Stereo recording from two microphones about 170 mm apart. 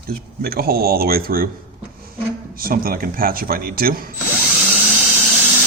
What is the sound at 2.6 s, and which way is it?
Speech, 60° right (ahead or behind).